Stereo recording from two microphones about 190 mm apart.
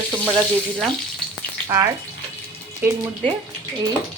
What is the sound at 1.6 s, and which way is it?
Speech, 20° right (ahead or behind).